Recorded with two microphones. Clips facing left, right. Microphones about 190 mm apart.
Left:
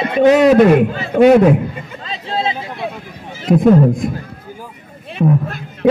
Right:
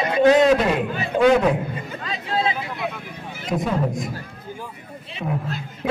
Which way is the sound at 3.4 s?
55° left (ahead or behind).